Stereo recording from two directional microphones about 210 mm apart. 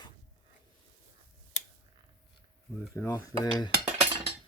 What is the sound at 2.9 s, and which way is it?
Cutlery, 10° left (ahead or behind).